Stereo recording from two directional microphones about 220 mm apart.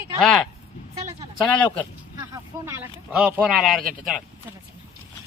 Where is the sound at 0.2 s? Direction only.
Centre (ahead or behind).